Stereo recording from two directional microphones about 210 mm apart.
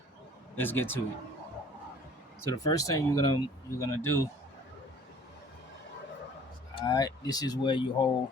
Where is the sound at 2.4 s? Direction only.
15° left (ahead or behind).